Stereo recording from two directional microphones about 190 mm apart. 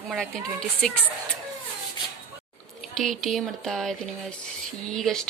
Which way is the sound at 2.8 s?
Centre (ahead or behind).